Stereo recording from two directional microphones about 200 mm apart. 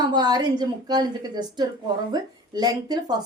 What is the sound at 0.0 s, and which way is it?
A woman's voice, 20° right (ahead or behind).